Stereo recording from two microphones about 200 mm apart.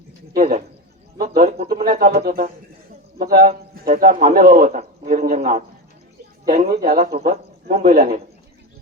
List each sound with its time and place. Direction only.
0.3 s a man's voice: 40° right (ahead or behind)